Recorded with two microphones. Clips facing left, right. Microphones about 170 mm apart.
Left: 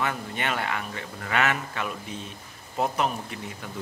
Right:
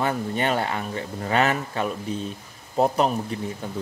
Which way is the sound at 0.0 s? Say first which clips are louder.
Right 5 dB; 35° right (ahead or behind).